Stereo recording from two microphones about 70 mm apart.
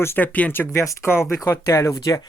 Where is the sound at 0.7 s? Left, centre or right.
Left.